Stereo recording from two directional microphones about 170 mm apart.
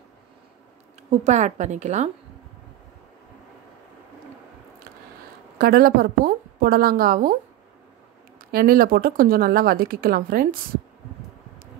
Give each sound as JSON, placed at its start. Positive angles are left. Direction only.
{"t": 1.1, "sound": "a woman's voice", "side_deg": -45}
{"t": 5.6, "sound": "a woman's voice", "side_deg": -60}
{"t": 8.5, "sound": "a woman's voice", "side_deg": -60}